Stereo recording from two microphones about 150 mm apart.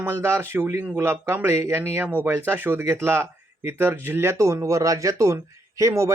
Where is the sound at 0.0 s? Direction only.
15° right (ahead or behind).